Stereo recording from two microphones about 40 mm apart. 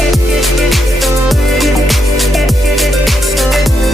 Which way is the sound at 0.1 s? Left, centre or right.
Centre.